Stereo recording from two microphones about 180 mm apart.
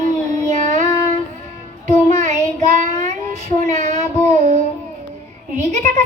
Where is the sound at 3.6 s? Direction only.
40° right (ahead or behind).